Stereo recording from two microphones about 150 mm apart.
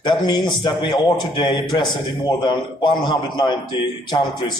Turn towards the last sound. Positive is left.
turn(degrees=30)  # may be behind; listen again after turning